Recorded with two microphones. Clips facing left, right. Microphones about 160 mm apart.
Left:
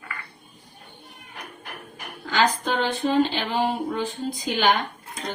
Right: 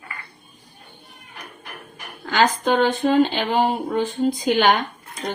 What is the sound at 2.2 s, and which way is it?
Speech, 55° right (ahead or behind).